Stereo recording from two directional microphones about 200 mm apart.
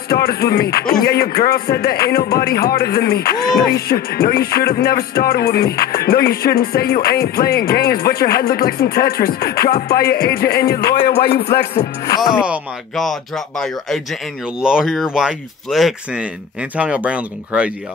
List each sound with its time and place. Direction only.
0.1 s speech: 50° left (ahead or behind)
12.4 s speech: centre (ahead or behind)